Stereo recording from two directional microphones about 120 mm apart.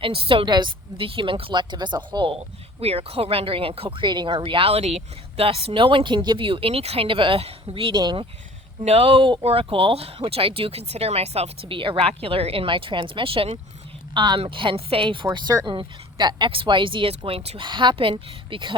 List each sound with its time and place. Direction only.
0.0 s speech: 50° right (ahead or behind)
2.8 s speech: 55° right (ahead or behind)
8.8 s speech: 60° right (ahead or behind)